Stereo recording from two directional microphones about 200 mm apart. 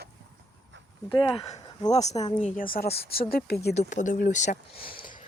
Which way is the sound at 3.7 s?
40° left (ahead or behind).